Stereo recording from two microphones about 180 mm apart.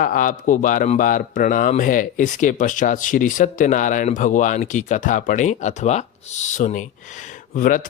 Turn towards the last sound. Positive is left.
turn(degrees=50)  # may be behind; listen again after turning